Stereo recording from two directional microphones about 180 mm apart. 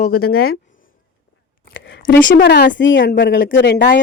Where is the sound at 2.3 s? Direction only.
80° left.